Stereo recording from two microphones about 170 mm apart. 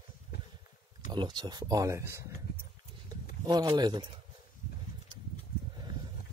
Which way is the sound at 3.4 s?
25° right (ahead or behind).